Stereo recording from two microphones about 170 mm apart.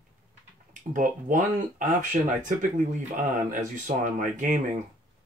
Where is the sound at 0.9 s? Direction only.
50° right (ahead or behind).